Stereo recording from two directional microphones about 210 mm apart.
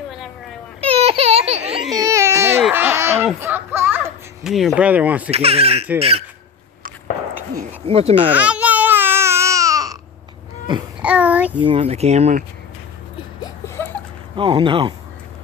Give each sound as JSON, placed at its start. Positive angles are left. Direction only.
{"t": 0.7, "sound": "baby cry", "side_deg": -30}
{"t": 2.0, "sound": "baby cry", "side_deg": -15}
{"t": 2.6, "sound": "a sound", "side_deg": -10}
{"t": 5.3, "sound": "speech", "side_deg": -30}
{"t": 7.8, "sound": "speech", "side_deg": -30}
{"t": 8.1, "sound": "babbling", "side_deg": -5}
{"t": 11.0, "sound": "child singing", "side_deg": -5}
{"t": 11.6, "sound": "speech", "side_deg": -25}
{"t": 13.4, "sound": "a sound", "side_deg": 10}
{"t": 14.3, "sound": "speech", "side_deg": -25}